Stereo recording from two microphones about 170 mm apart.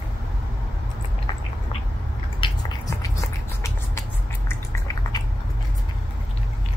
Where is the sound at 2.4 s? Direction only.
30° left (ahead or behind).